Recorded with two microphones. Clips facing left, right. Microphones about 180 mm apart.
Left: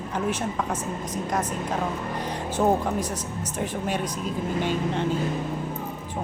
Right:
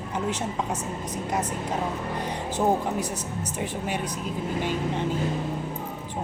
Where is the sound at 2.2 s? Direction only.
15° right (ahead or behind).